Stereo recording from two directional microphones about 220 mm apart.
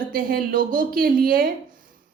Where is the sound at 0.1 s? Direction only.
40° right (ahead or behind).